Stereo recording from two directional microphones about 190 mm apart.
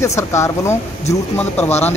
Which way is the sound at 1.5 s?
35° left (ahead or behind).